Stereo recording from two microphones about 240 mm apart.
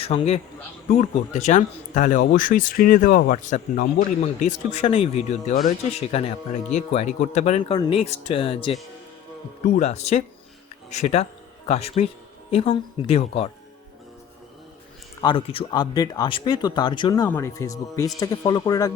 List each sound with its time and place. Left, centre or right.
0.0 s speech: left
9.7 s speech: left
15.2 s speech: left